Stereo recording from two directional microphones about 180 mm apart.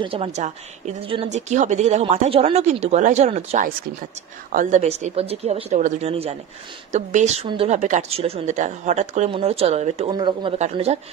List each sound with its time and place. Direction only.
0.0 s a woman's voice: 30° right (ahead or behind)
10.6 s a woman's voice: 40° right (ahead or behind)